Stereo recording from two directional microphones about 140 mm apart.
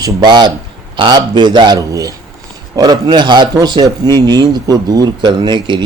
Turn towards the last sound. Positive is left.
turn(degrees=-30)  # may be behind; listen again after turning